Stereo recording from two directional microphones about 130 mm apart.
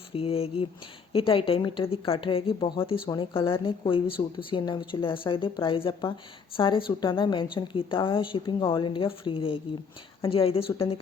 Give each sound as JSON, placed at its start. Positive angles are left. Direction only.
{"t": 0.1, "sound": "speech", "side_deg": 45}